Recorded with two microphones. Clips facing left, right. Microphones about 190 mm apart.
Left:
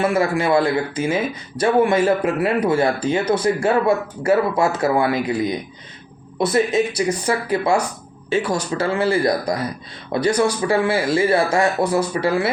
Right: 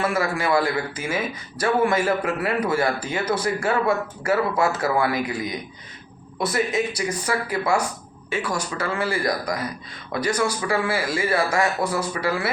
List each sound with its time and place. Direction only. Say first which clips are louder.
0.0 s speech: left 5 dB; 25° left (ahead or behind)